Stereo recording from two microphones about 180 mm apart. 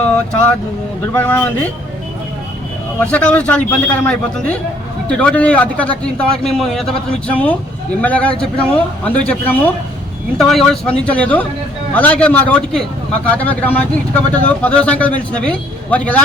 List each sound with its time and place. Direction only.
1.1 s speech: 10° left (ahead or behind)
3.0 s speech: 5° left (ahead or behind)